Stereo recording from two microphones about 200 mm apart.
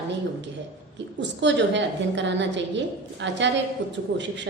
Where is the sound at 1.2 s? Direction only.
60° right (ahead or behind).